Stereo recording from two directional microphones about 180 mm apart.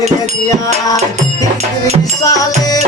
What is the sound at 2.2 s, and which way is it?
Music, 20° left (ahead or behind).